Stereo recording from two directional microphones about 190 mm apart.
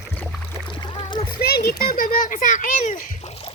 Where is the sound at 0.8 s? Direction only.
25° left (ahead or behind).